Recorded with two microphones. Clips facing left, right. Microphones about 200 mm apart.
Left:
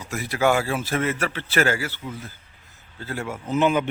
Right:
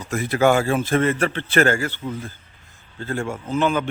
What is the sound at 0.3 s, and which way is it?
Speech, 50° right (ahead or behind).